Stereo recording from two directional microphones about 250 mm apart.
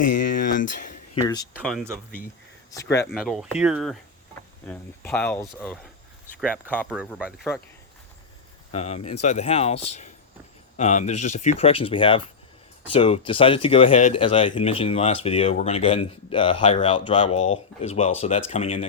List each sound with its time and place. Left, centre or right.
0.2 s a sound: left
1.1 s speech: centre
1.5 s speech: centre
2.7 s speech: centre
3.1 s speech: centre
8.7 s speech: left